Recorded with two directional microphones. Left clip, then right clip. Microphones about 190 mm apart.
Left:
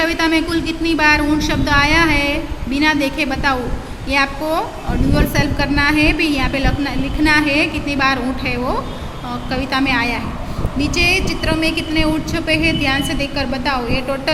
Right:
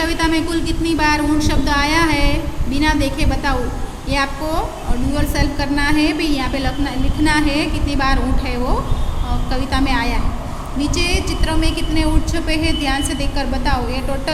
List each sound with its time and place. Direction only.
0.0 s a woman's voice: 5° left (ahead or behind)